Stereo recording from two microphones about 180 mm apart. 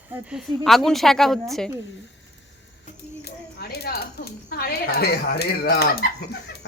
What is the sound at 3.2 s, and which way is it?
Speech, 65° left (ahead or behind).